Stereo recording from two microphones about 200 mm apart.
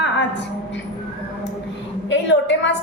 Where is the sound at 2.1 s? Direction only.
65° left (ahead or behind).